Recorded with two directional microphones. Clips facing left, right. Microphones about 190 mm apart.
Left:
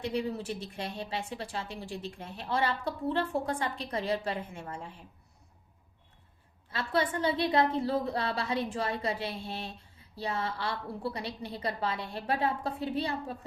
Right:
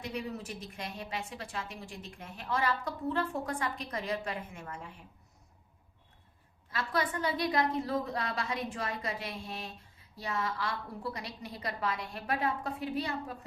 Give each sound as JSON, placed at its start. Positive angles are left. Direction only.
{"t": 0.1, "sound": "a woman's voice", "side_deg": 30}
{"t": 6.7, "sound": "a woman's voice", "side_deg": 30}